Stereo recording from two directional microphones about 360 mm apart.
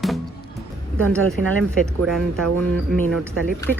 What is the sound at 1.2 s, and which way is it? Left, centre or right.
Speech, right.